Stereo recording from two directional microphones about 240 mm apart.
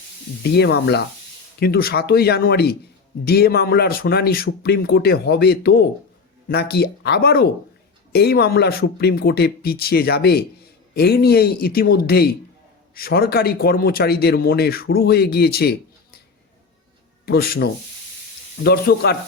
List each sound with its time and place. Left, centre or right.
0.5 s speech: left
17.2 s speech: left